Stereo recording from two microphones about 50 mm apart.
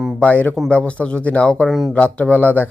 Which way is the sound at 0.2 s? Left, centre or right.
Left.